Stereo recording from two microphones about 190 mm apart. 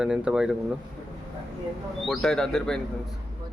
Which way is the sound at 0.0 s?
5° right (ahead or behind).